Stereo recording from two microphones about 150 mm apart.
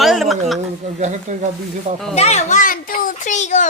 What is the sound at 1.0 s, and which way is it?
Speech, 50° right (ahead or behind).